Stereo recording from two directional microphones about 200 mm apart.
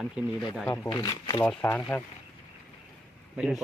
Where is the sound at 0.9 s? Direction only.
20° left (ahead or behind).